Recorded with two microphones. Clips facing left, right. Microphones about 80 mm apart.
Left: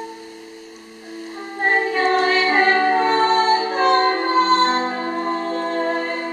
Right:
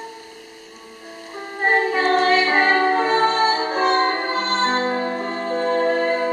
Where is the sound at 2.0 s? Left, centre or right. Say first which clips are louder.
Even; centre.